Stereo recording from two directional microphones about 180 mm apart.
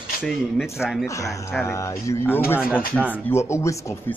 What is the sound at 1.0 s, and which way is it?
A man's voice, 15° left (ahead or behind).